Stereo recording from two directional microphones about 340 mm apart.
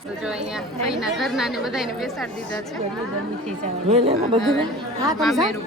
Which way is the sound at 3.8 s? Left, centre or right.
Centre.